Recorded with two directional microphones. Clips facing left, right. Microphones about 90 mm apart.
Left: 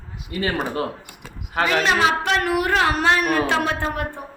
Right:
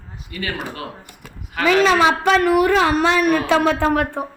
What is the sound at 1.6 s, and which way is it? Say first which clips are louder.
Speech: right 2 dB; 35° left (ahead or behind).